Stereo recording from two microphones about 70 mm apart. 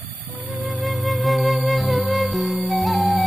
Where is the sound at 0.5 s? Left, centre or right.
Centre.